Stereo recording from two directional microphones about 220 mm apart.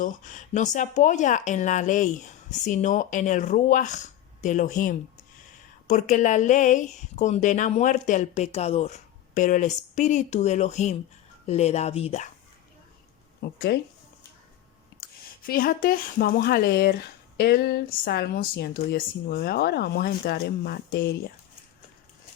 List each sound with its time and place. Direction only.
0.0 s speech: 35° left (ahead or behind)
13.4 s speech: 45° left (ahead or behind)
15.4 s speech: 40° left (ahead or behind)